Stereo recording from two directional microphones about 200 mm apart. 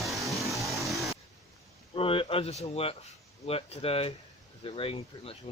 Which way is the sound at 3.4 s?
30° left (ahead or behind).